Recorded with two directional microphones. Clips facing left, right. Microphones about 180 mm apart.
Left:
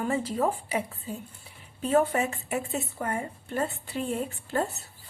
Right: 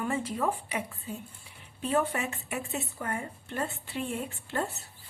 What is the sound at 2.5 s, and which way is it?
Speech, 40° left (ahead or behind).